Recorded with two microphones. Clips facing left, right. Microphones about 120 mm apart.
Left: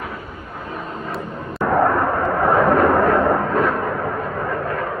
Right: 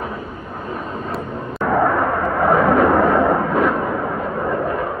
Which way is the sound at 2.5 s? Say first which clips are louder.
Right 1 dB; centre (ahead or behind).